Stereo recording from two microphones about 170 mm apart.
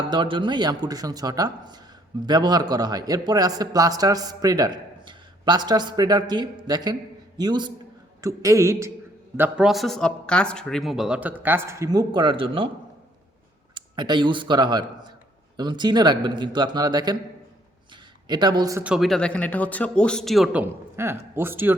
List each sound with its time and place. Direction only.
0.1 s a woman's voice: 30° right (ahead or behind)
9.4 s speech: 5° right (ahead or behind); by 12.6 s 30° right (ahead or behind)
13.7 s speech: 25° right (ahead or behind)
18.3 s speech: 25° right (ahead or behind)
18.8 s speech: 5° right (ahead or behind)